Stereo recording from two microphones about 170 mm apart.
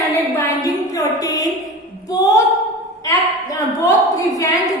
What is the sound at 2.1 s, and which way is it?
Female singing, 20° left (ahead or behind).